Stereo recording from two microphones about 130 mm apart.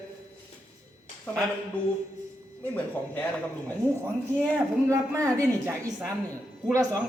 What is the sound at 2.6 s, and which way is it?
Speech, 15° left (ahead or behind).